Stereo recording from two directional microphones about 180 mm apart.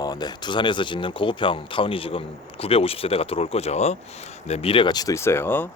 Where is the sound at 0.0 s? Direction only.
20° left (ahead or behind).